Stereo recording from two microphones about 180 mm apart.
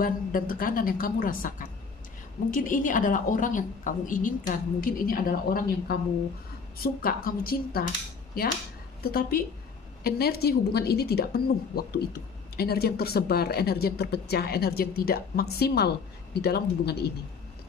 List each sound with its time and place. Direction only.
0.0 s a woman's voice: 50° left (ahead or behind)